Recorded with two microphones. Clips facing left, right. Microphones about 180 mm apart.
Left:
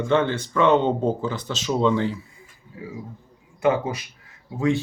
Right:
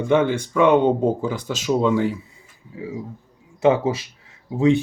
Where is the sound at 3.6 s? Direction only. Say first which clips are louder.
Right 4 dB; 25° right (ahead or behind).